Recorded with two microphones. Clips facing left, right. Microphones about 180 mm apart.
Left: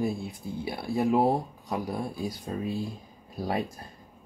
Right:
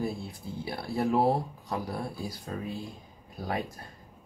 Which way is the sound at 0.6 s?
15° left (ahead or behind).